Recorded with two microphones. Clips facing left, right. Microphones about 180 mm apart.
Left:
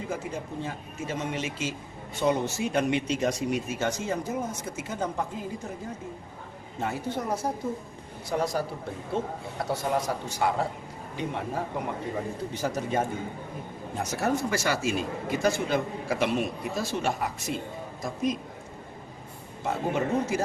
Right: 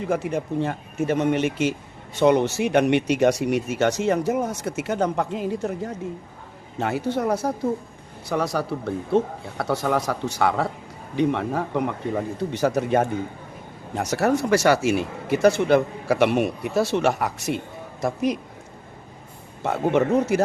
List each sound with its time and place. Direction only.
0.1 s speech: 70° right (ahead or behind)
2.1 s speech: 75° right (ahead or behind)
19.6 s speech: 70° right (ahead or behind)